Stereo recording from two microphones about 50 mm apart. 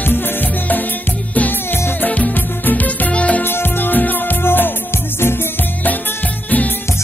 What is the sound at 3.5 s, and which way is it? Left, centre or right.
Music, left.